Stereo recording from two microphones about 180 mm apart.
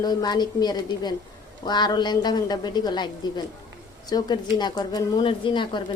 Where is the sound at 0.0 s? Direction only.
20° left (ahead or behind).